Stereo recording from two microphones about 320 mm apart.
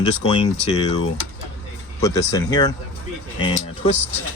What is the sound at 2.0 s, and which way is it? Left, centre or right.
Speech, centre.